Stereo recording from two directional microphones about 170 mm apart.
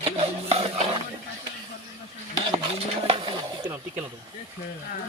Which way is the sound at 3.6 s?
15° right (ahead or behind).